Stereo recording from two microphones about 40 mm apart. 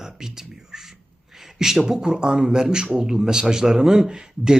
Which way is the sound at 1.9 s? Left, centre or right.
Centre.